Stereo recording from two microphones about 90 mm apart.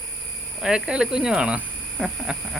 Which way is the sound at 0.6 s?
10° right (ahead or behind).